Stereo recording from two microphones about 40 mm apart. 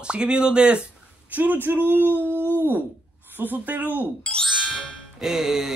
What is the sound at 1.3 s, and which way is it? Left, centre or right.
Speech, right.